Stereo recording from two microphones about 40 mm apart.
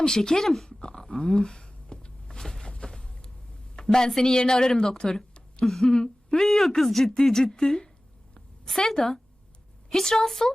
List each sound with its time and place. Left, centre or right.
0.0 s speech: centre
0.8 s power windows: centre
3.8 s speech: centre
6.4 s speech: centre